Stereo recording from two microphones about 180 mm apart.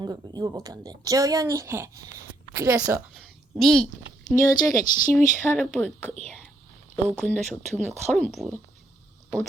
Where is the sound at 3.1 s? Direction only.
Centre (ahead or behind).